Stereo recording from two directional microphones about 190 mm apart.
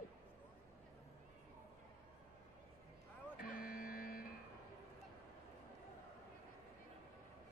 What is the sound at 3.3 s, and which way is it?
Vehicle, 50° left (ahead or behind).